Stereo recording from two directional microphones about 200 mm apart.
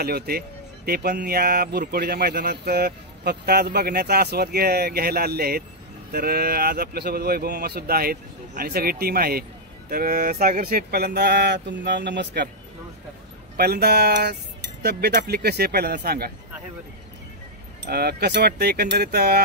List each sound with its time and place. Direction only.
0.0 s speech: 50° right (ahead or behind)
13.6 s speech: 50° right (ahead or behind)
17.8 s speech: 50° right (ahead or behind)